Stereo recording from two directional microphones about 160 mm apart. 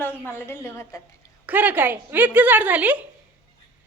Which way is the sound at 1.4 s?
10° right (ahead or behind).